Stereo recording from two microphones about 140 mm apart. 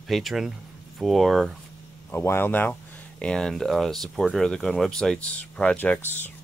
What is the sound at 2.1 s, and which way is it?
Speech, 15° left (ahead or behind).